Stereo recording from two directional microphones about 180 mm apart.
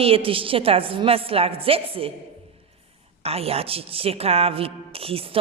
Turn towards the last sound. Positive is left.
turn(degrees=-30)  # may be behind; listen again after turning